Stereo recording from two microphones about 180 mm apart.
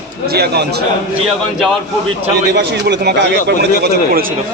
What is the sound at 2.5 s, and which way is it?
A man's voice, 70° right (ahead or behind).